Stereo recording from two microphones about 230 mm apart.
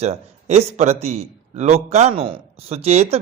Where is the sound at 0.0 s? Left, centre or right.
Right.